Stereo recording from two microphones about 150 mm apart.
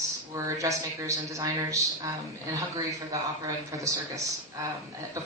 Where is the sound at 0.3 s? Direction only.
20° right (ahead or behind).